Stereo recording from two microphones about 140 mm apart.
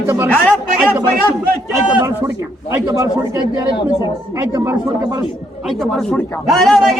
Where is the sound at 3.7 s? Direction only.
35° left (ahead or behind).